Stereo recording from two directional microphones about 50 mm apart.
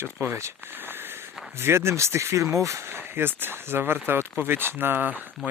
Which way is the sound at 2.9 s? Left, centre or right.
Right.